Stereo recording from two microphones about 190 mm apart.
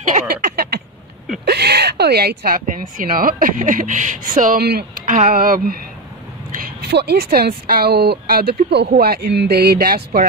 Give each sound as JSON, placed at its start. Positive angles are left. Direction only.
{"t": 0.1, "sound": "a sound", "side_deg": -50}
{"t": 1.4, "sound": "speech", "side_deg": -60}
{"t": 6.6, "sound": "speech", "side_deg": -60}